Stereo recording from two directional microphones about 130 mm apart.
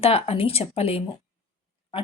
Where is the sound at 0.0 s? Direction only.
50° left (ahead or behind).